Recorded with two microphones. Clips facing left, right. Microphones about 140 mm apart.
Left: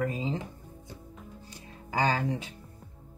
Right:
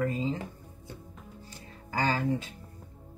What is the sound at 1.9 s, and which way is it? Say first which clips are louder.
Speech: even; 15° left (ahead or behind).